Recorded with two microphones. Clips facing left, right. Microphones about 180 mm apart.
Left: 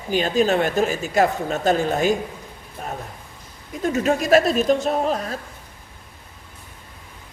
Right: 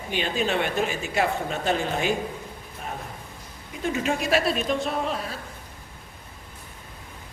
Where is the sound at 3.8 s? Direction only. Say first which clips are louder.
Left 5 dB; 40° left (ahead or behind).